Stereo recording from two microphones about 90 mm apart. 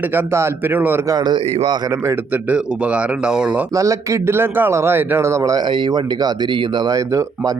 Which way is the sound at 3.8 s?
35° right (ahead or behind).